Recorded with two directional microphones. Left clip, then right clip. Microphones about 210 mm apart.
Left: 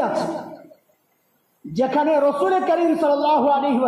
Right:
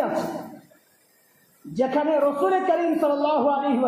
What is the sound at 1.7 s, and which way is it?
A woman's voice, 25° left (ahead or behind).